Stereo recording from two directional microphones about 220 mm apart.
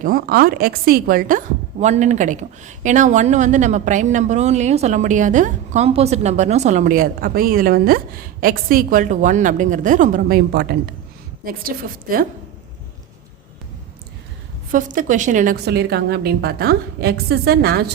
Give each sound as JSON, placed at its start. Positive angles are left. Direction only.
{"t": 0.0, "sound": "a woman's voice", "side_deg": -40}
{"t": 14.7, "sound": "a woman's voice", "side_deg": -35}